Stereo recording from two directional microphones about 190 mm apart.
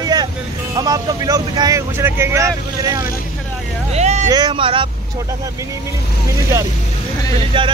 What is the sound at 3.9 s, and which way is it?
Vehicle, 35° right (ahead or behind).